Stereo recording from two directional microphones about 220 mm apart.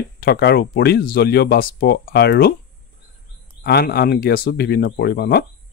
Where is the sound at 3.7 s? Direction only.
45° left (ahead or behind).